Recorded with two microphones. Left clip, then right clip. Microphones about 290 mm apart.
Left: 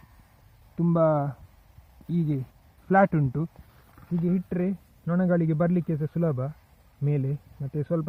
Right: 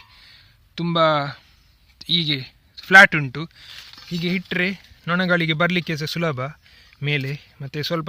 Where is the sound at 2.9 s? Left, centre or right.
Centre.